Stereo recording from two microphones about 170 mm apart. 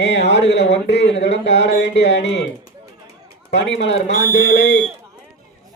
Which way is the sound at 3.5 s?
90° left.